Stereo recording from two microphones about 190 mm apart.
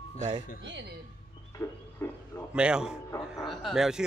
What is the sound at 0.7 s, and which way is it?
Speech, 65° right (ahead or behind).